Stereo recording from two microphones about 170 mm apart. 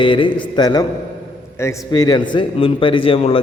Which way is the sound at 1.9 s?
25° left (ahead or behind).